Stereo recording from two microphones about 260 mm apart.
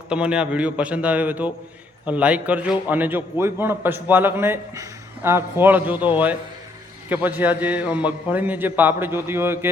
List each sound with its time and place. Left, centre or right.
0.1 s a man's voice: centre